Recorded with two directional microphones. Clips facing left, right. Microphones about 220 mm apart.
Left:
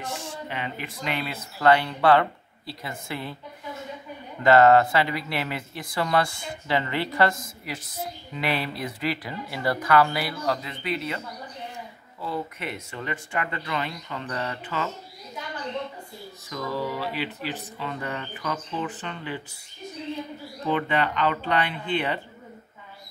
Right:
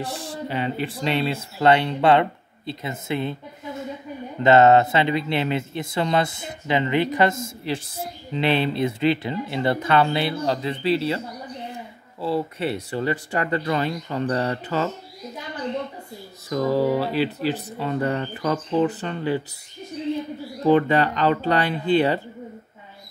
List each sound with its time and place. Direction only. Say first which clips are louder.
0.0 s speech: right 4 dB; 35° right (ahead or behind)
4.4 s speech: right 2 dB; 25° right (ahead or behind)
16.4 s speech: right 10 dB; 40° right (ahead or behind)
20.6 s speech: right 8 dB; 40° right (ahead or behind)